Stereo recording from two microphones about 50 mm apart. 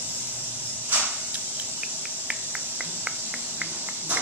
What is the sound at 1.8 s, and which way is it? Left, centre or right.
Cricket, centre.